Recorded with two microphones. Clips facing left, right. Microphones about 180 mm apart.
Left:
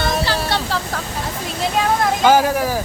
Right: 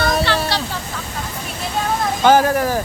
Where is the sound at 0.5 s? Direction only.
55° left (ahead or behind).